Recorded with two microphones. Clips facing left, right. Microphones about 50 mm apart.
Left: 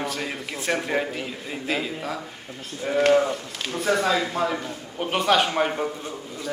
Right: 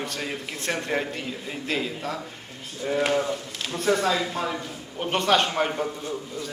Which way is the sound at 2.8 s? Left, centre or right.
Left.